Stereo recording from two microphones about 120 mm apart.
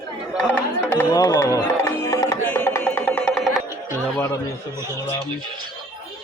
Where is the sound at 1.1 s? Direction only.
30° left (ahead or behind); by 3.4 s 10° left (ahead or behind).